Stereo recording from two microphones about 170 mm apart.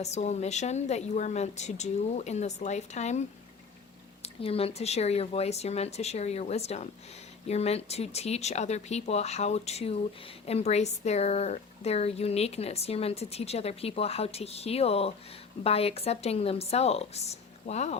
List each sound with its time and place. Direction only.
0.0 s speech: 40° left (ahead or behind)